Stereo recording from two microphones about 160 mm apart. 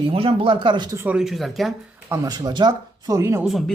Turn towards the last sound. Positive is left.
turn(degrees=0)  # may be behind; listen again after turning